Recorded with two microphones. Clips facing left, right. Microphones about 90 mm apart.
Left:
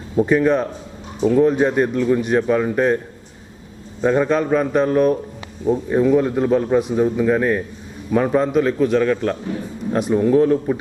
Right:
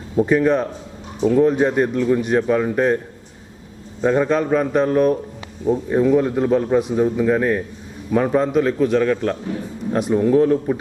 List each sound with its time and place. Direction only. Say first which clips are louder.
0.2 s a man's voice: even; 20° left (ahead or behind)
4.0 s a man's voice: even; 25° left (ahead or behind)